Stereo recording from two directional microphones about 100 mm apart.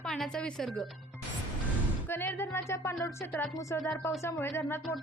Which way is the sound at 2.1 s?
25° left (ahead or behind).